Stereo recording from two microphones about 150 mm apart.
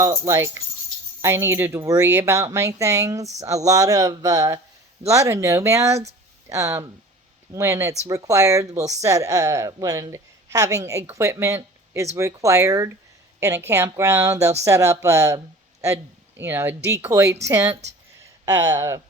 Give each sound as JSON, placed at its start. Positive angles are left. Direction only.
{"t": 0.0, "sound": "speech", "side_deg": -20}
{"t": 16.4, "sound": "speech", "side_deg": -15}